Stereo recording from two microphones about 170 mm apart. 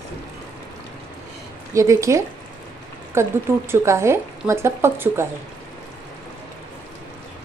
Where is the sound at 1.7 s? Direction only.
20° right (ahead or behind).